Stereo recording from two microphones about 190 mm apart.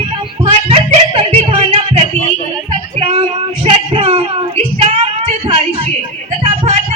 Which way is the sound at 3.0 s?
30° right (ahead or behind).